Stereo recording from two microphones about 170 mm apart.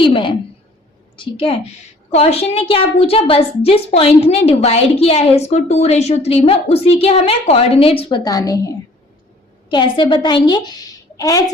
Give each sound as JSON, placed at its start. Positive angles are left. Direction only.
{"t": 0.0, "sound": "a sound", "side_deg": 30}
{"t": 1.1, "sound": "a woman's voice", "side_deg": 30}
{"t": 8.2, "sound": "a woman's voice", "side_deg": 20}